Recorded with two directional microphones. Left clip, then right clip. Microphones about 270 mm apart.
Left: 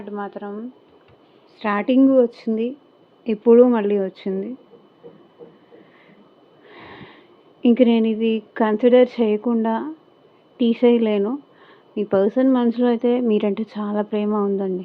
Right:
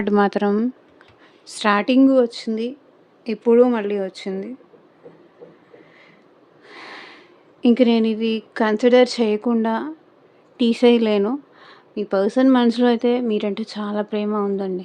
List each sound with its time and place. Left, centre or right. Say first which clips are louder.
0.0 s speech: right 12 dB; right
1.5 s a woman's voice: right 3 dB; right; by 4.5 s centre
6.7 s snort: right 4 dB; centre
7.6 s a woman's voice: even; centre